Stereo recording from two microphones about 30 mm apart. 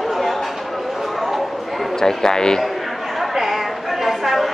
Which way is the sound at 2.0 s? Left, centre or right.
Centre.